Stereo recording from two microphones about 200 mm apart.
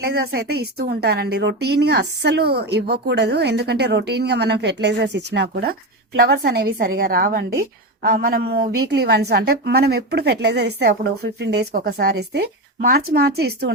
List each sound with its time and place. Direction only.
0.0 s a woman's voice: 55° right (ahead or behind)